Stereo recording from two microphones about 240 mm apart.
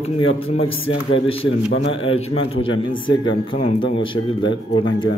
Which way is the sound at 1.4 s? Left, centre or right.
Left.